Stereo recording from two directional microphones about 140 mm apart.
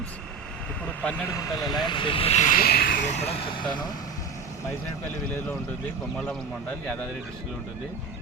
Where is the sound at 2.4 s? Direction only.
85° left; by 3.9 s 35° left (ahead or behind).